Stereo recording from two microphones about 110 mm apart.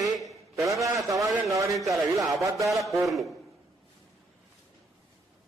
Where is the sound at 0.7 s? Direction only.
30° right (ahead or behind).